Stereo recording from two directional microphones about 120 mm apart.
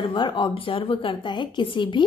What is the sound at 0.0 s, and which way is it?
A woman's voice, 40° left (ahead or behind).